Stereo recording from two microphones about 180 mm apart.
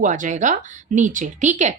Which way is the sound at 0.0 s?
45° right (ahead or behind).